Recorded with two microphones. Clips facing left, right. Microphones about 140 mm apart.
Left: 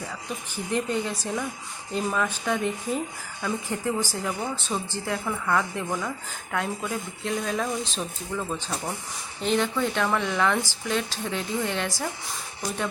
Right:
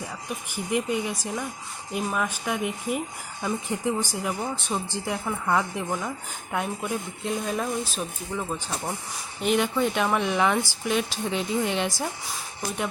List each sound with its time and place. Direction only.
0.5 s speech: 15° right (ahead or behind)